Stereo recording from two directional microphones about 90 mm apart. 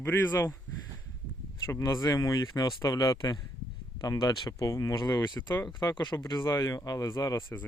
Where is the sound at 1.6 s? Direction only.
35° left (ahead or behind).